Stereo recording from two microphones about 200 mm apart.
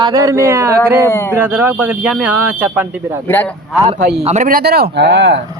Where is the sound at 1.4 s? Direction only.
10° right (ahead or behind).